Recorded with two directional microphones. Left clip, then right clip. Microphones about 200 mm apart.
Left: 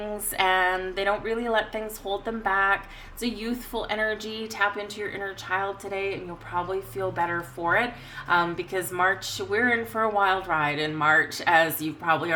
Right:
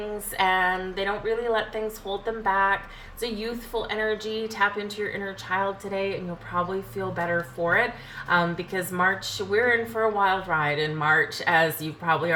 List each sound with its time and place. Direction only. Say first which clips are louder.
0.3 s a woman's voice: even; 50° left (ahead or behind)
7.2 s a woman's voice: right 3 dB; 55° left (ahead or behind)